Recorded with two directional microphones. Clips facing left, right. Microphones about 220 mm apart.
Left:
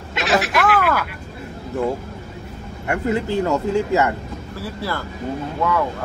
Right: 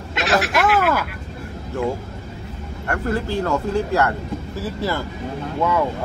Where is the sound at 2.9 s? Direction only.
10° left (ahead or behind).